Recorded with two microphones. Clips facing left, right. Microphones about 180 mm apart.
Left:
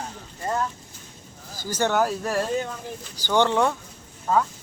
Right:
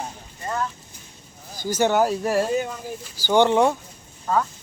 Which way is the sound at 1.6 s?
10° right (ahead or behind).